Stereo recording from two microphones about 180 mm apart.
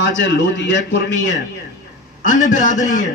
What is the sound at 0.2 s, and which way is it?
A man's voice, 90° left.